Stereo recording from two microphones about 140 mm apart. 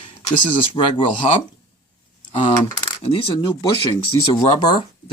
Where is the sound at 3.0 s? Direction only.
40° left (ahead or behind).